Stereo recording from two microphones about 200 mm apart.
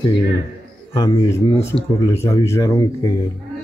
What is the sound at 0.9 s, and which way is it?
Speech, 20° left (ahead or behind).